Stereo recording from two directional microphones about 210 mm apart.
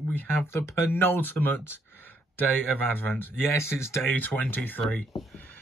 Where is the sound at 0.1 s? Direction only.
10° left (ahead or behind).